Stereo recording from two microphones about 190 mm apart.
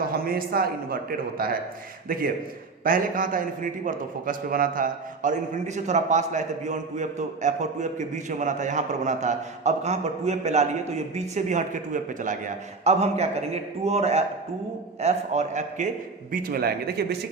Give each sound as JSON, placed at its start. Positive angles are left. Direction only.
{"t": 0.1, "sound": "a man's voice", "side_deg": -50}
{"t": 2.0, "sound": "a man's voice", "side_deg": -50}
{"t": 16.3, "sound": "a man's voice", "side_deg": -50}